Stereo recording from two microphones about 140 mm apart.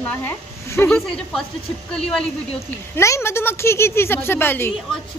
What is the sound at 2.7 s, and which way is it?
Speech, 20° left (ahead or behind).